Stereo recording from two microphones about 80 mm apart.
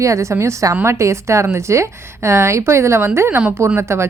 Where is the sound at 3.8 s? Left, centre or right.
Right.